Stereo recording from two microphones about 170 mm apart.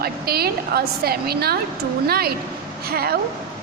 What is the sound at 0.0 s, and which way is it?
A woman's voice, 65° right (ahead or behind).